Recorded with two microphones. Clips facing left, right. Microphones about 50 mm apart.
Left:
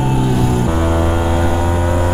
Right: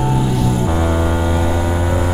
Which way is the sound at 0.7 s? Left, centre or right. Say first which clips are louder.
Left 1 dB; left.